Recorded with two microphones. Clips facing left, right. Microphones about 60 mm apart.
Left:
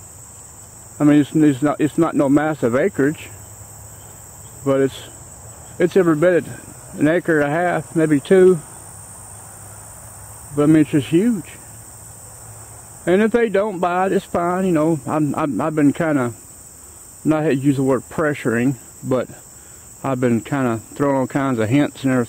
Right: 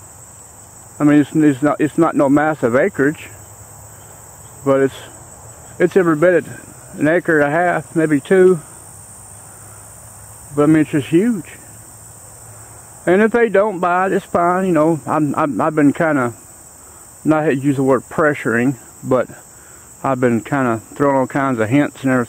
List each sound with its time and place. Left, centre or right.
0.9 s speech: centre
4.6 s speech: centre
10.5 s speech: centre
13.0 s speech: centre